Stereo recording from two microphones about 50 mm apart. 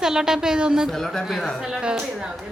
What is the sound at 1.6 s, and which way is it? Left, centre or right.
Speech, centre.